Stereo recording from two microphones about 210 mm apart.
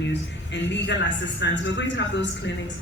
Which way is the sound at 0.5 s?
55° left (ahead or behind).